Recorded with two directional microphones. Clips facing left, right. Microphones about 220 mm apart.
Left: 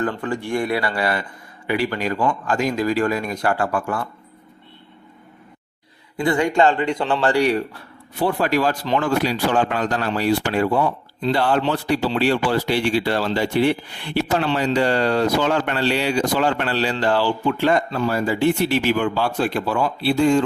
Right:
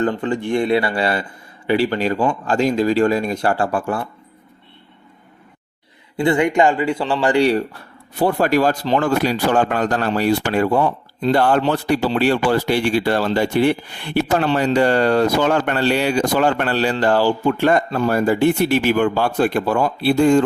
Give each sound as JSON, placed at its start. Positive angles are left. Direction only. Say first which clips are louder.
{"t": 0.0, "sound": "speech", "louder": "right 4 dB", "side_deg": -20}
{"t": 6.1, "sound": "speech", "louder": "right 2 dB", "side_deg": -20}
{"t": 7.3, "sound": "speech", "louder": "right 5 dB", "side_deg": -30}
{"t": 8.2, "sound": "speech", "louder": "right 3 dB", "side_deg": -45}